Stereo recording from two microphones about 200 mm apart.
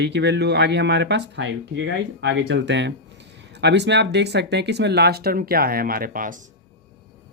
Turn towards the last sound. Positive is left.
turn(degrees=-45)  # may be behind; listen again after turning